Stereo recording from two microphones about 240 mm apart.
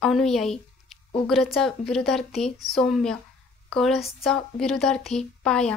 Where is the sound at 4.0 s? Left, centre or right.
Left.